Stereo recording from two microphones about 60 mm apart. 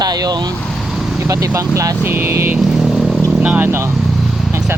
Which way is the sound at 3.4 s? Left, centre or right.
Right.